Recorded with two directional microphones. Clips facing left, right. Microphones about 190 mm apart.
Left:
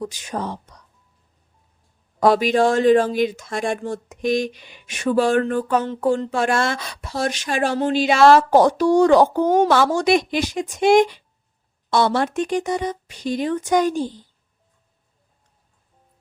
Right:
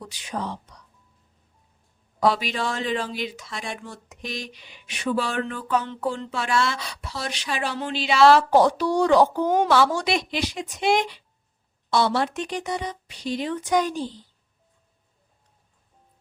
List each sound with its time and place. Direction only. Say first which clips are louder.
0.0 s speech: left 4 dB; 45° left (ahead or behind)
2.2 s speech: left 7 dB; 50° left (ahead or behind)